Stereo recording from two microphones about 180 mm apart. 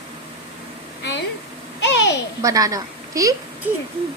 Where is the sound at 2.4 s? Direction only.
20° right (ahead or behind).